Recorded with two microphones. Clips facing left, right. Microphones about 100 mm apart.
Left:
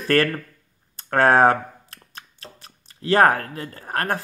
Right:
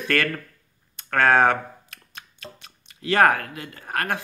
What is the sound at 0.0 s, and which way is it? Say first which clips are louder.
Speech: left 4 dB; 35° left (ahead or behind).